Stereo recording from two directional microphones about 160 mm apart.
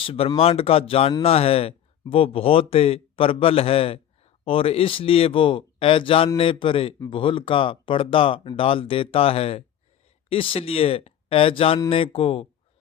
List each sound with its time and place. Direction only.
0.0 s speech: 35° left (ahead or behind)